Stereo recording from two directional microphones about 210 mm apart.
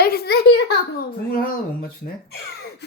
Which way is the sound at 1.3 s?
45° left (ahead or behind).